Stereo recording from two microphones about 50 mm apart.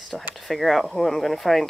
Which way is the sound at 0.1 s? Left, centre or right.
Centre.